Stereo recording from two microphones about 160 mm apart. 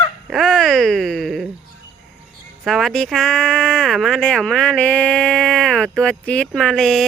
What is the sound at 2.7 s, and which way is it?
Speech, centre (ahead or behind).